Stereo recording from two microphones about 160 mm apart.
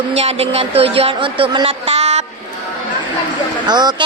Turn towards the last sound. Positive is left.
turn(degrees=-25)  # may be behind; listen again after turning